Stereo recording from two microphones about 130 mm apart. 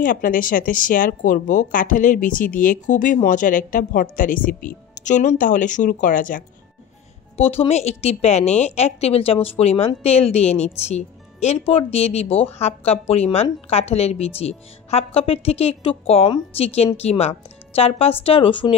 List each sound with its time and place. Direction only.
0.0 s speech: 90° left
7.3 s a woman's voice: 50° left (ahead or behind)